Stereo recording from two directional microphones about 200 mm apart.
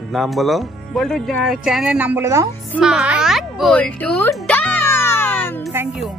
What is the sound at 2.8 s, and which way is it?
Music, 5° right (ahead or behind).